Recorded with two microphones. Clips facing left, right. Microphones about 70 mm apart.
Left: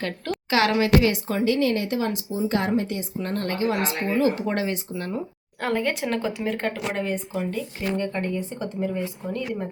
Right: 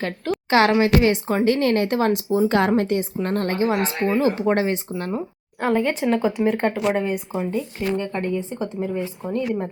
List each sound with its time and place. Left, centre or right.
0.5 s speech: right
2.8 s speech: right
3.2 s speech: right
5.5 s speech: centre